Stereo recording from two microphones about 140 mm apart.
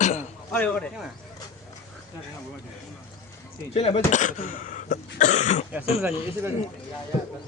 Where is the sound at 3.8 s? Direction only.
45° left (ahead or behind).